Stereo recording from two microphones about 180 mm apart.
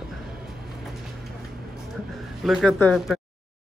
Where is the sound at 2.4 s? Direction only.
Centre (ahead or behind).